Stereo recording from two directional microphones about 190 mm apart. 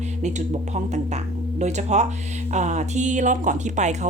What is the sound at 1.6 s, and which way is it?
Speech, 35° right (ahead or behind).